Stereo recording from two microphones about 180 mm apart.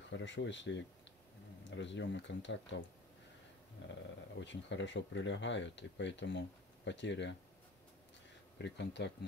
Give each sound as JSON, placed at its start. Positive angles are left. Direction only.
{"t": 0.1, "sound": "speech", "side_deg": 90}
{"t": 3.8, "sound": "a sound", "side_deg": 90}
{"t": 4.4, "sound": "speech", "side_deg": 90}
{"t": 8.5, "sound": "speech", "side_deg": 70}